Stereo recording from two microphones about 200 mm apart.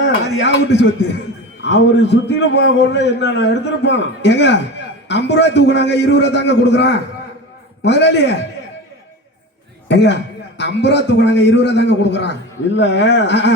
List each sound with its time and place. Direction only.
0.0 s a sound: 60° left (ahead or behind)
1.6 s a man's voice: 60° left (ahead or behind)
9.9 s a man's voice: 60° left (ahead or behind)